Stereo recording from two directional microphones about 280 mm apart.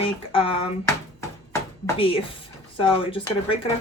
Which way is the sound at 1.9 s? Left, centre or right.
Centre.